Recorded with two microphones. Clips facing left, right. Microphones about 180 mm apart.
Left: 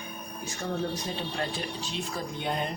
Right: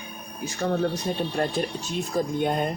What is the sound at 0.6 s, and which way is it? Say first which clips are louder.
Speech: right 7 dB; 60° right (ahead or behind).